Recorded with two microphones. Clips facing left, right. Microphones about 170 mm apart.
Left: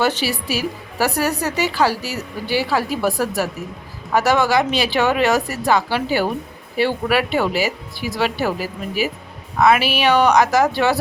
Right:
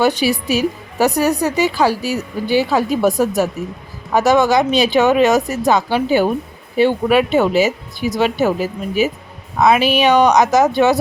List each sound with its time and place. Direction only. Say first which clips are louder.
0.0 s a woman's voice: right 5 dB; 15° right (ahead or behind)
9.6 s speech: right 3 dB; 20° right (ahead or behind)